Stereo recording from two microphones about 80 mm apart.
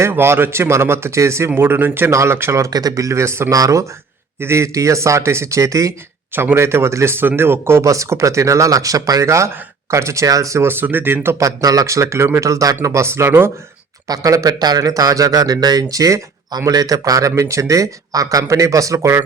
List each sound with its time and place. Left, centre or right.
0.0 s a man's voice: right
1.5 s a man's voice: right
4.4 s a man's voice: right
6.3 s a man's voice: right
11.3 s a man's voice: right
14.1 s speech: right